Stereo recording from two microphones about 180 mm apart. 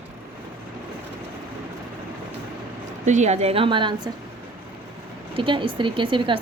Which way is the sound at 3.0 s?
40° right (ahead or behind).